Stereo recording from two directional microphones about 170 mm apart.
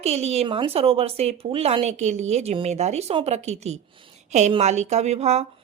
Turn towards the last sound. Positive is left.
turn(degrees=-40)  # may be behind; listen again after turning